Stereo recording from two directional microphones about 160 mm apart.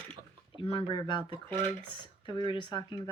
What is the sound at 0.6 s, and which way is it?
Speech, 35° left (ahead or behind).